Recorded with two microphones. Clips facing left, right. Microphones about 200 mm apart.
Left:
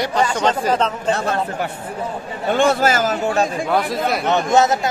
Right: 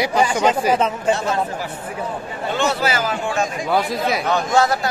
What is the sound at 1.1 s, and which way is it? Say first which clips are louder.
Speech: left 1 dB; 60° left (ahead or behind).